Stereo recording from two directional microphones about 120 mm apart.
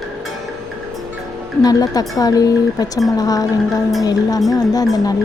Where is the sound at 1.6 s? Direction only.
30° left (ahead or behind).